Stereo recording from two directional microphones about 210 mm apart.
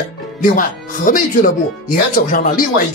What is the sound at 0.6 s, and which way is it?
Speech, 40° left (ahead or behind).